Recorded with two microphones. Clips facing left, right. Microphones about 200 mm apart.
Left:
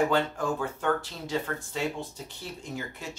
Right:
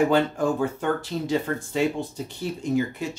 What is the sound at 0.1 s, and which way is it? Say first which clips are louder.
Speech: right 6 dB; 15° right (ahead or behind).